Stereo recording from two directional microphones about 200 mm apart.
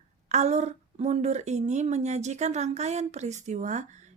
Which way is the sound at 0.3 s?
35° right (ahead or behind).